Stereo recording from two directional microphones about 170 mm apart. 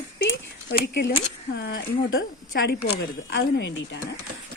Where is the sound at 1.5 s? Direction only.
90° left.